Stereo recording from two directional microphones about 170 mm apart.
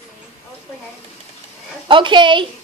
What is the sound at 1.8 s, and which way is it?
Speech, 30° right (ahead or behind).